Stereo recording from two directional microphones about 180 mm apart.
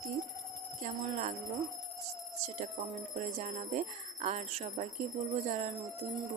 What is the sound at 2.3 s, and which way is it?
Speech, 40° right (ahead or behind).